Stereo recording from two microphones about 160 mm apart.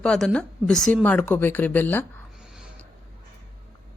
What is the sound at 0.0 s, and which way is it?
Speech, 5° left (ahead or behind).